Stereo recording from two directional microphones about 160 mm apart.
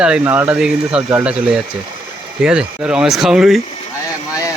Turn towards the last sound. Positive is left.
turn(degrees=0)  # may be behind; listen again after turning